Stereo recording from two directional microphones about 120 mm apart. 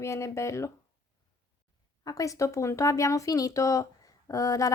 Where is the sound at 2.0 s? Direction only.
30° left (ahead or behind).